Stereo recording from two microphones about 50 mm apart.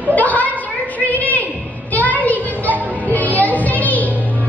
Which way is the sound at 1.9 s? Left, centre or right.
Left.